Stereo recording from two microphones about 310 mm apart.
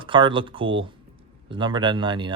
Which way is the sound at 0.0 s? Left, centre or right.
Centre.